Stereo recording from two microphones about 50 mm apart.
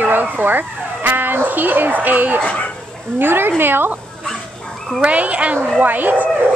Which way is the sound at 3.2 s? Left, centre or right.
Right.